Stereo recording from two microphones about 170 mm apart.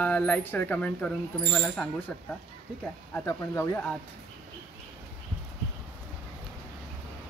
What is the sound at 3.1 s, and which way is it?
Speech, 15° left (ahead or behind).